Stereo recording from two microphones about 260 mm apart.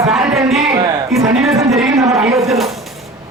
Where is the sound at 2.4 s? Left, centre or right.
Centre.